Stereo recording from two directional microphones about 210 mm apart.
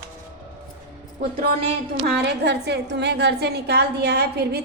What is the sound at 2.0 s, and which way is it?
Speech, 50° right (ahead or behind).